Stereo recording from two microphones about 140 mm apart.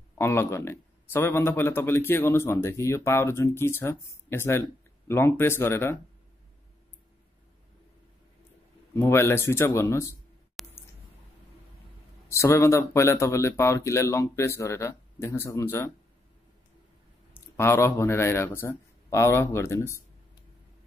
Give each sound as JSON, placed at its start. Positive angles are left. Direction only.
{"t": 0.2, "sound": "speech", "side_deg": 20}
{"t": 8.9, "sound": "speech", "side_deg": 20}
{"t": 10.6, "sound": "a sound", "side_deg": 0}
{"t": 12.3, "sound": "speech", "side_deg": 20}
{"t": 17.3, "sound": "a man's voice", "side_deg": 15}